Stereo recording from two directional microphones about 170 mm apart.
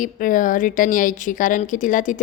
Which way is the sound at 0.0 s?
50° left (ahead or behind).